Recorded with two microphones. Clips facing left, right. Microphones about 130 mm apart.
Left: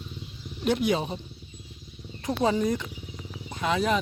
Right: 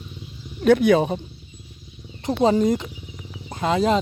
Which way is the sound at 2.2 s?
30° right (ahead or behind).